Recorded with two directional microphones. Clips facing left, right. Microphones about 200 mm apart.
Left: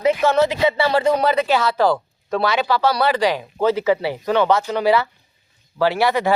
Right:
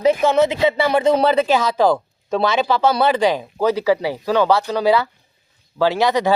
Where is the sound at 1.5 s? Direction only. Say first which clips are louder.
Right 1 dB; 15° right (ahead or behind).